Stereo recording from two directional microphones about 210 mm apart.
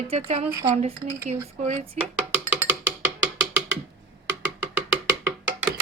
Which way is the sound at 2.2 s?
10° right (ahead or behind).